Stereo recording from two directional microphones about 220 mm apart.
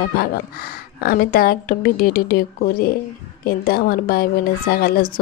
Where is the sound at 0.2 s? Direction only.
45° left (ahead or behind).